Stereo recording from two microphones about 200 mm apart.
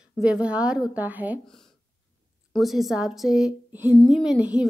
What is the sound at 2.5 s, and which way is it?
Speech, centre (ahead or behind).